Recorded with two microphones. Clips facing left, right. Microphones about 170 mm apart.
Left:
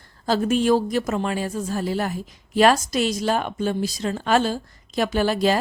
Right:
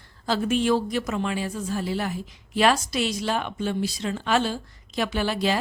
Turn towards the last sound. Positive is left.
turn(degrees=45)  # may be behind; listen again after turning